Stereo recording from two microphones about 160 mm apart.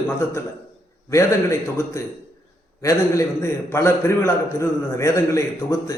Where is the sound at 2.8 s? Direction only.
20° left (ahead or behind).